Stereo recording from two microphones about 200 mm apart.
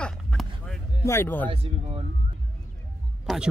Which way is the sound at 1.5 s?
30° right (ahead or behind).